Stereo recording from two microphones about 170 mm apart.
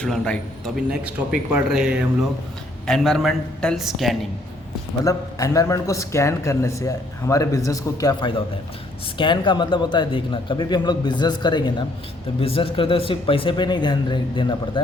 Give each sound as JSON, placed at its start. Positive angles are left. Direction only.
{"t": 0.0, "sound": "speech", "side_deg": 5}
{"t": 5.0, "sound": "a man's voice", "side_deg": 20}